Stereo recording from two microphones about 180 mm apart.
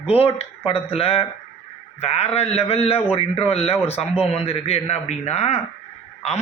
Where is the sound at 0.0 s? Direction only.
30° left (ahead or behind).